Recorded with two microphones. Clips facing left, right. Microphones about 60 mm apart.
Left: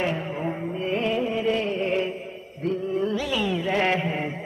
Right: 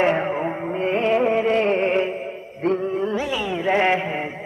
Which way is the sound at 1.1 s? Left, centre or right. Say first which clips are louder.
Right 7 dB; right.